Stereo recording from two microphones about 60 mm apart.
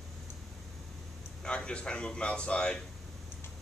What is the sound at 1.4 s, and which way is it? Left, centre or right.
Speech, centre.